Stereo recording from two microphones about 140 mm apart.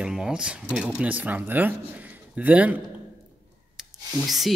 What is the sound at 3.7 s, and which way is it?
Rub, centre (ahead or behind).